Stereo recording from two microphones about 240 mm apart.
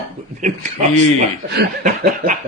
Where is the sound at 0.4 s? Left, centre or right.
Right.